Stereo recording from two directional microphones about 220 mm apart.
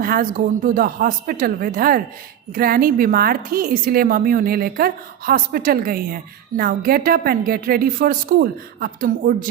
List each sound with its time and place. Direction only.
0.0 s a woman's voice: 40° right (ahead or behind)